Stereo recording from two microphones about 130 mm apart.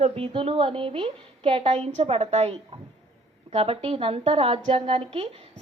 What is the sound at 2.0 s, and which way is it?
A woman's voice, 55° right (ahead or behind).